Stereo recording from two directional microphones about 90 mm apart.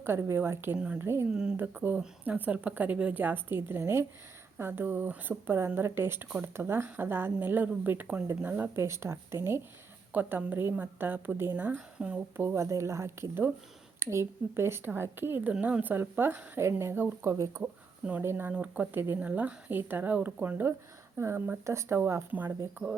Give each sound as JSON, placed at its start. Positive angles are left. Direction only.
{"t": 0.0, "sound": "speech", "side_deg": -30}
{"t": 1.3, "sound": "a woman's voice", "side_deg": -10}
{"t": 1.5, "sound": "a woman's voice", "side_deg": -20}
{"t": 8.7, "sound": "speech", "side_deg": -30}
{"t": 12.4, "sound": "speech", "side_deg": -30}
{"t": 17.6, "sound": "a sound", "side_deg": -20}
{"t": 18.3, "sound": "a woman's voice", "side_deg": -20}